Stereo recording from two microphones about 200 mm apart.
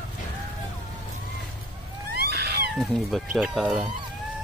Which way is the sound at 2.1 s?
50° right (ahead or behind).